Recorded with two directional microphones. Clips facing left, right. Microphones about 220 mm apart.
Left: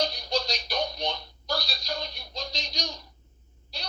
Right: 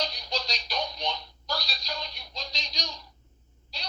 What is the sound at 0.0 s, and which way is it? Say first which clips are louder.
Music: left 5 dB; 50° left (ahead or behind).